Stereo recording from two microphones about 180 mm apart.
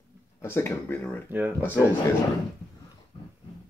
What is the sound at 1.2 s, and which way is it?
Speech, 10° right (ahead or behind).